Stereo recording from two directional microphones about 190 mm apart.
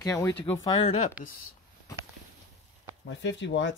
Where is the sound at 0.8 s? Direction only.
30° left (ahead or behind).